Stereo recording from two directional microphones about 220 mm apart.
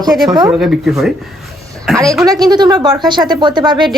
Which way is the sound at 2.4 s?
20° right (ahead or behind).